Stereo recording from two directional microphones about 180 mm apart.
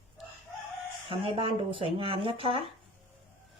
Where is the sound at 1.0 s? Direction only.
30° right (ahead or behind).